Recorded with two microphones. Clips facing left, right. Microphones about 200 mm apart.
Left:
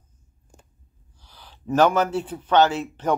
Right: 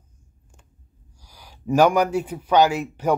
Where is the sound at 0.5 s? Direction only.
35° left (ahead or behind).